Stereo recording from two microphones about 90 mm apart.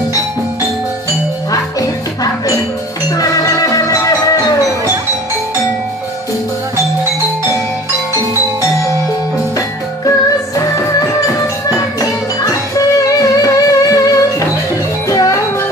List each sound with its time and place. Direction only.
1.5 s music: 40° left (ahead or behind)
10.0 s music: 40° left (ahead or behind)